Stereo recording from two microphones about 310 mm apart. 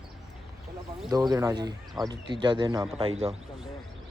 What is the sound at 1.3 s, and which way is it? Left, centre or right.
Speech, centre.